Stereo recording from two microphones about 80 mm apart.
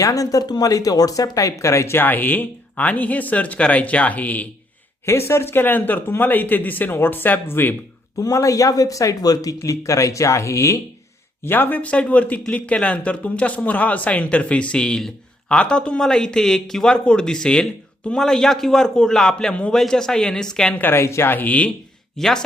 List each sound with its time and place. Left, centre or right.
0.0 s speech: left; by 4.4 s centre
5.0 s speech: left
8.2 s speech: left
11.4 s a man's voice: left; by 20.7 s centre
20.7 s speech: left
22.2 s speech: centre